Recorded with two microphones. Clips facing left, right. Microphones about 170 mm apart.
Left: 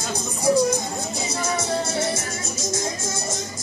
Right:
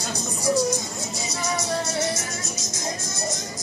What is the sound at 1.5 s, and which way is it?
Music, 25° left (ahead or behind).